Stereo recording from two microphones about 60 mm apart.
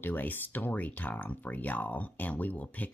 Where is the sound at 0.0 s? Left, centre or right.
Left.